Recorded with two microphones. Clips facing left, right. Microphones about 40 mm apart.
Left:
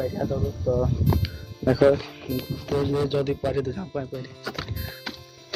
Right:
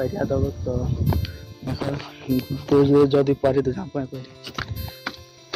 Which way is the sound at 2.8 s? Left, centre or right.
Right.